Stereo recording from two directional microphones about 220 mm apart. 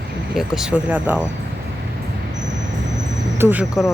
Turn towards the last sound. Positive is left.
turn(degrees=-5)  # may be behind; listen again after turning